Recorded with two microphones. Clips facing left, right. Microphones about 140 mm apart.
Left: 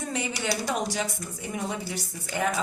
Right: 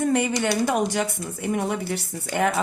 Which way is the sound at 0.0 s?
55° right (ahead or behind).